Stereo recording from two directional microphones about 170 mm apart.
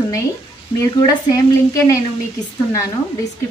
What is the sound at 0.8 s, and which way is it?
Speech, 20° left (ahead or behind).